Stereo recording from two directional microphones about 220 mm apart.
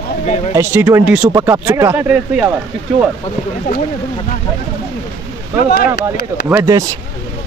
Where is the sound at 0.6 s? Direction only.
10° right (ahead or behind).